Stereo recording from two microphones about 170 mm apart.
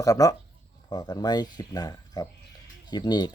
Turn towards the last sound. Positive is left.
turn(degrees=25)  # may be behind; listen again after turning